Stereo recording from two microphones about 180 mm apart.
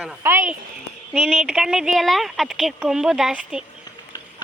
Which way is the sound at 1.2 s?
Centre (ahead or behind).